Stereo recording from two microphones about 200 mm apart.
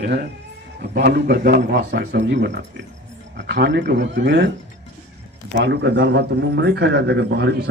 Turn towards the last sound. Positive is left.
turn(degrees=-60)  # may be behind; listen again after turning